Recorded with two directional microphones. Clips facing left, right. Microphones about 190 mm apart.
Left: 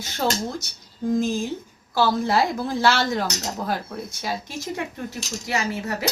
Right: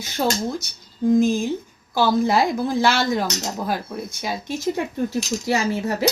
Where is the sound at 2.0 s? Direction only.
15° right (ahead or behind).